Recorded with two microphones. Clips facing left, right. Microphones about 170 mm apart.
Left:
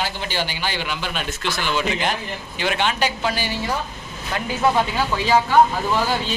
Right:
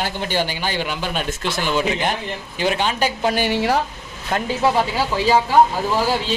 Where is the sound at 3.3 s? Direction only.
60° right (ahead or behind); by 3.8 s 75° right (ahead or behind).